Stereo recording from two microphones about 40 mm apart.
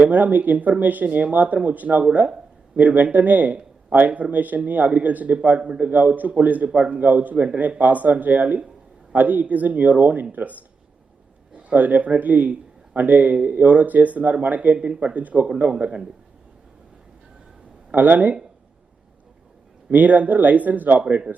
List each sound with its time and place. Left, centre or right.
0.0 s a man's voice: right
5.9 s a man's voice: right
11.7 s a man's voice: right
13.3 s a man's voice: right
14.8 s speech: right
15.0 s a man's voice: right
17.9 s speech: right
19.9 s speech: right